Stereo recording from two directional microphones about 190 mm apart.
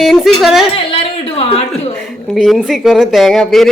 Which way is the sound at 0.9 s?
30° left (ahead or behind).